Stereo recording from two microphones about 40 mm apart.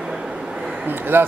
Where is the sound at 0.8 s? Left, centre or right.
Right.